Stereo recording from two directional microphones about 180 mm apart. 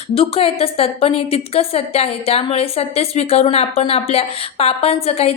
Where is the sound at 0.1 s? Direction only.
30° left (ahead or behind).